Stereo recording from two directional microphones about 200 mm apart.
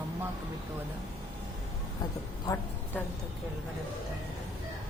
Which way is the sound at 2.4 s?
15° left (ahead or behind).